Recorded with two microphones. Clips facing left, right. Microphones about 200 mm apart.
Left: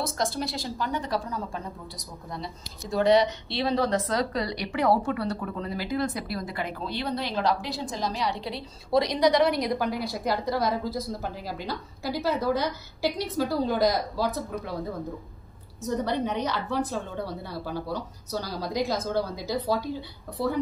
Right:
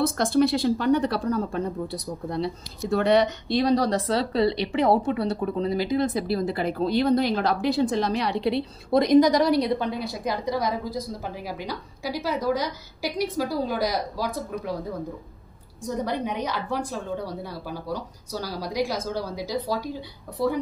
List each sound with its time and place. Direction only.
0.0 s speech: 60° right (ahead or behind); by 14.8 s 10° right (ahead or behind)
15.8 s speech: 10° right (ahead or behind)